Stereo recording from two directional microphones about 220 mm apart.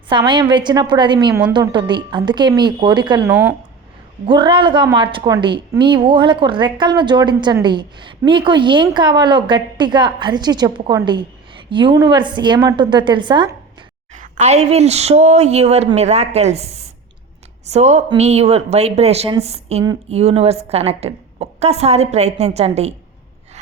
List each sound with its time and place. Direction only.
0.1 s a woman's voice: 20° right (ahead or behind)
14.1 s a woman's voice: 35° right (ahead or behind)
19.8 s speech: 20° right (ahead or behind)
20.1 s a woman's voice: 30° right (ahead or behind)